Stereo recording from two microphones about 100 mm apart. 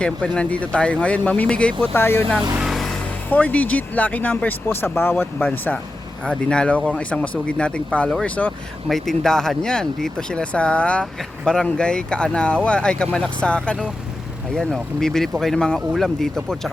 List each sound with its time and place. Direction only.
0.3 s speech: 10° left (ahead or behind)
1.9 s speech: 20° left (ahead or behind)
2.6 s music: centre (ahead or behind)
3.2 s speech: 15° left (ahead or behind)
6.2 s speech: 10° left (ahead or behind)
8.9 s speech: 5° left (ahead or behind)